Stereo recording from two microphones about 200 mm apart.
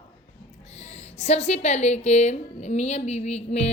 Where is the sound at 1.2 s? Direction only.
35° left (ahead or behind).